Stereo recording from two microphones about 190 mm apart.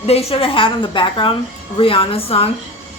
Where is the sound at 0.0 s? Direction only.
30° left (ahead or behind).